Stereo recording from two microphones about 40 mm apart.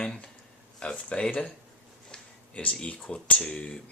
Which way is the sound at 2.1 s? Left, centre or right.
Left.